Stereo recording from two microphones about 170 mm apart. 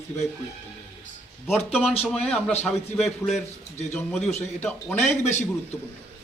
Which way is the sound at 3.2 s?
15° left (ahead or behind).